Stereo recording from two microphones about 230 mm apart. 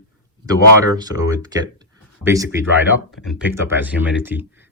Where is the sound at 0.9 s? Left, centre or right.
Centre.